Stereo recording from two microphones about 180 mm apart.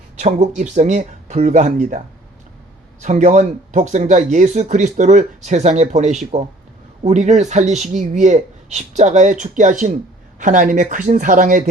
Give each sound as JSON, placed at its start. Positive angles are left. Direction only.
{"t": 0.2, "sound": "speech", "side_deg": -40}
{"t": 3.0, "sound": "speech", "side_deg": -40}